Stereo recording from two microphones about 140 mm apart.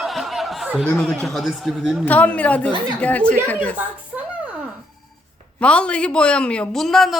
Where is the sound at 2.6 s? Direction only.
35° right (ahead or behind).